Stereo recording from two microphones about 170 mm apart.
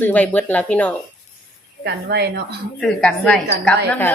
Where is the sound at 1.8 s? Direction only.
80° right.